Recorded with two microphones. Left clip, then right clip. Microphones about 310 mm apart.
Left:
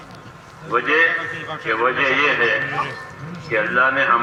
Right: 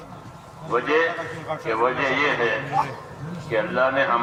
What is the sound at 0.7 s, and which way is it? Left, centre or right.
A man's voice, centre.